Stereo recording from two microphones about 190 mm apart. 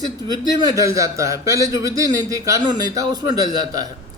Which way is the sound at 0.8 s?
15° right (ahead or behind).